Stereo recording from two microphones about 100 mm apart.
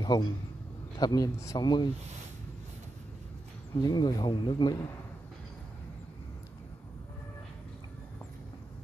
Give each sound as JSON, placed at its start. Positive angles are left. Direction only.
{"t": 0.0, "sound": "a man's voice", "side_deg": 50}
{"t": 3.8, "sound": "speech", "side_deg": 45}